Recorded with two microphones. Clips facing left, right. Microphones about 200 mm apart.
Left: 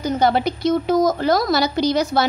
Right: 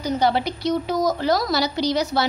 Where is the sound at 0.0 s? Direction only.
50° left (ahead or behind).